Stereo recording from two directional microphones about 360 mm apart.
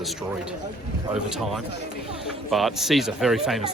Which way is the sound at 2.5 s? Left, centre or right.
Centre.